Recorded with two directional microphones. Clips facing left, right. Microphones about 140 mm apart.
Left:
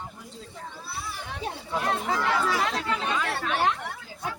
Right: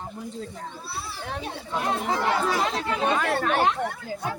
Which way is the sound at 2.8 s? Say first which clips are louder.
Right 4 dB; 45° right (ahead or behind).